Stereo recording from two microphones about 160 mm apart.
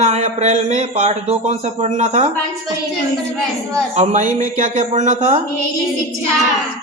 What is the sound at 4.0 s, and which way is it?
A man's voice, 50° right (ahead or behind).